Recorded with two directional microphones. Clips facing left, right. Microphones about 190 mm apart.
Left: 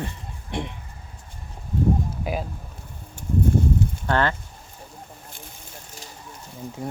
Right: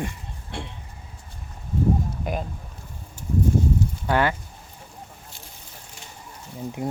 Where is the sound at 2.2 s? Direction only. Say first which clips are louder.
Left 1 dB; 5° left (ahead or behind).